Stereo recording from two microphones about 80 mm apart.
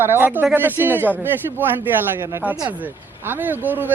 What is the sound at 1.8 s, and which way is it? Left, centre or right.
Speech, right.